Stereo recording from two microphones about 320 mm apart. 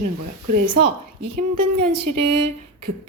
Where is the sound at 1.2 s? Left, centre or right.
Right.